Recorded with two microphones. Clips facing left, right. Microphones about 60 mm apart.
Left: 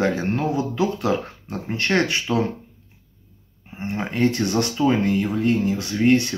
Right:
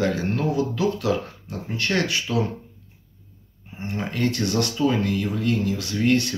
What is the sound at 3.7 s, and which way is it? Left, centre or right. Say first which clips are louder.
Speech: left 2 dB; left.